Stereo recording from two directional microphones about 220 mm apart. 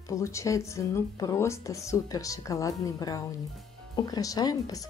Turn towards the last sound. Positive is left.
turn(degrees=15)  # may be behind; listen again after turning